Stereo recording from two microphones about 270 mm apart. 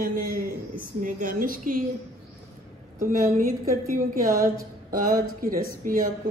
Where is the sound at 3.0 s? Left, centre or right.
Right.